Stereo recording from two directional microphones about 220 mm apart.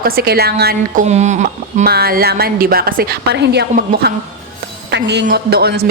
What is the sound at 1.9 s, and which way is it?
A woman's voice, 45° right (ahead or behind).